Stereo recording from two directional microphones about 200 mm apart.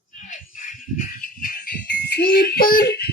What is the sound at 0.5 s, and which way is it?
Jingle bell, 40° left (ahead or behind).